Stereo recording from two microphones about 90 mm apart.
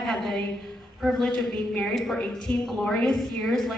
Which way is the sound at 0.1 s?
5° left (ahead or behind).